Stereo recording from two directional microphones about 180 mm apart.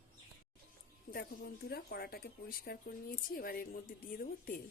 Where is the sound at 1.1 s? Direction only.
60° left (ahead or behind).